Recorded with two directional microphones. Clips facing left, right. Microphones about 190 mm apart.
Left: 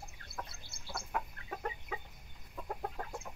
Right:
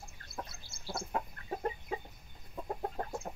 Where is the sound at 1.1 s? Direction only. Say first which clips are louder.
Right 2 dB; 30° right (ahead or behind).